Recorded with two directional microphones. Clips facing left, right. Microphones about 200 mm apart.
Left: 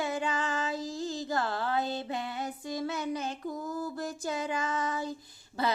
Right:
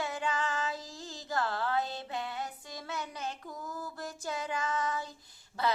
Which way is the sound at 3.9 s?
15° left (ahead or behind).